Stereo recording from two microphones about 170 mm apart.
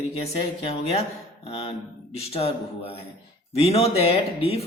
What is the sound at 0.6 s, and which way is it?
Speech, 35° left (ahead or behind).